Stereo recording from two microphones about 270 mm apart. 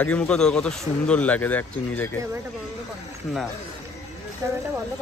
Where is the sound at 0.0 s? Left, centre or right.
Centre.